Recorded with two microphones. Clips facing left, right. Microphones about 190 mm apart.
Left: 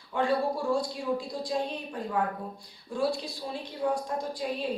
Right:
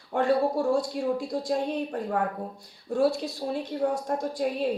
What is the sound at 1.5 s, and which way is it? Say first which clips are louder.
A woman's voice: right 4 dB; 55° right (ahead or behind).